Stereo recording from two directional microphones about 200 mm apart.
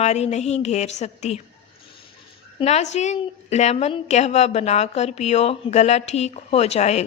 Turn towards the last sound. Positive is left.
turn(degrees=35)  # may be behind; listen again after turning